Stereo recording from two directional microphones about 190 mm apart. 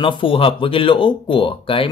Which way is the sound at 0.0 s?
25° left (ahead or behind).